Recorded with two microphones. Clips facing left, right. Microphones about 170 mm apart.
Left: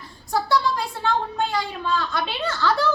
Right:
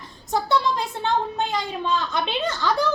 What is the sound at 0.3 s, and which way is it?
A woman's voice, 20° right (ahead or behind).